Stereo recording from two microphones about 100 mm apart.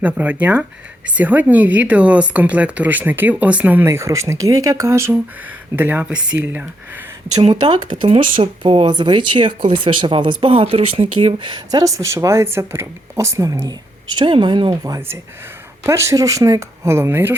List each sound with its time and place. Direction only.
0.0 s speech: 15° right (ahead or behind)
7.5 s speech: 45° right (ahead or behind)
8.0 s speech: 70° right (ahead or behind)
8.9 s speech: 50° right (ahead or behind)
14.2 s speech: 55° right (ahead or behind)
15.8 s speech: 30° right (ahead or behind)